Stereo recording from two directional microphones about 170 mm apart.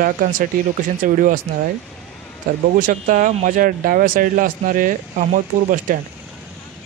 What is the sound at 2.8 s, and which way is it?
Speech, 55° right (ahead or behind).